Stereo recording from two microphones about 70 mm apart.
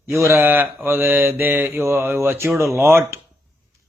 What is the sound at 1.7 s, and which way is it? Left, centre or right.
Speech, right.